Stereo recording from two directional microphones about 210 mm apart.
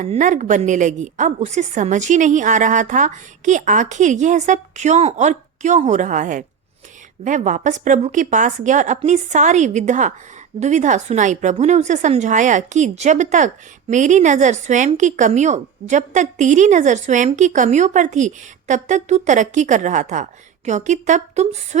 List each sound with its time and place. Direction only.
0.0 s a woman's voice: 35° right (ahead or behind)